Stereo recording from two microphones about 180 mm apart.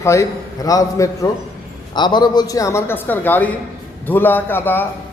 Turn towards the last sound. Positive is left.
turn(degrees=10)  # may be behind; listen again after turning